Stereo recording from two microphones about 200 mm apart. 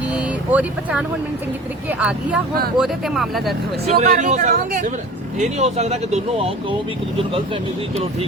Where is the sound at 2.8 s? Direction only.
Centre (ahead or behind).